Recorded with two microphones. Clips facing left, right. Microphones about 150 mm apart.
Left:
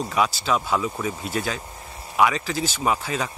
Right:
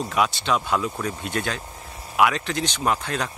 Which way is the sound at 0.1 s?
Centre (ahead or behind).